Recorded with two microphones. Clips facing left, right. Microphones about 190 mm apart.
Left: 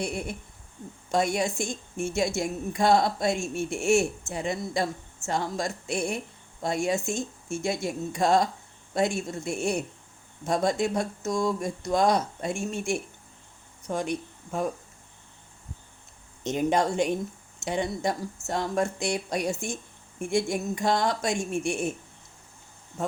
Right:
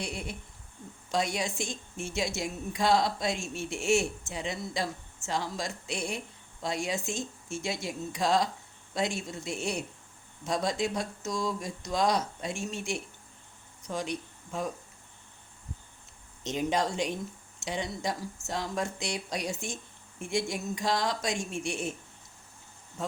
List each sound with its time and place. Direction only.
0.0 s speech: 50° left (ahead or behind)
16.4 s speech: 55° left (ahead or behind)